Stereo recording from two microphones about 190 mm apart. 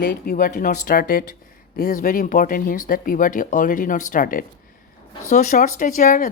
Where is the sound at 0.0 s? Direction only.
50° left (ahead or behind).